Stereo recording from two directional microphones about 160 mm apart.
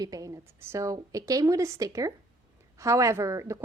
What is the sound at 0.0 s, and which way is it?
A woman's voice, 20° right (ahead or behind).